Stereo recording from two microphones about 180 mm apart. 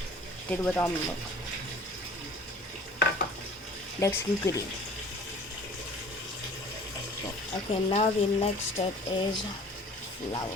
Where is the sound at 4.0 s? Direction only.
15° left (ahead or behind).